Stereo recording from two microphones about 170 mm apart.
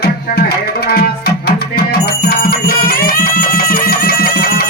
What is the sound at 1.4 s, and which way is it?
Music, 60° left (ahead or behind).